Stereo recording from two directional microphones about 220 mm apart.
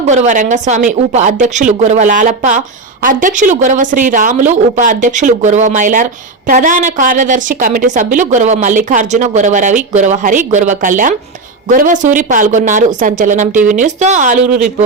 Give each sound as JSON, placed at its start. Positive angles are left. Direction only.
{"t": 0.0, "sound": "speech", "side_deg": -30}